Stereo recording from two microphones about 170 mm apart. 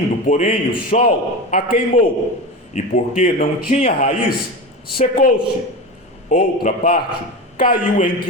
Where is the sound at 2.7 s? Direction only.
45° left (ahead or behind).